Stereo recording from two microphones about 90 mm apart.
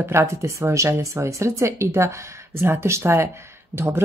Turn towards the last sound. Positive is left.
turn(degrees=-25)  # may be behind; listen again after turning